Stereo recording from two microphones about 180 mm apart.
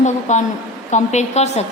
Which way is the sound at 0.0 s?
40° left (ahead or behind).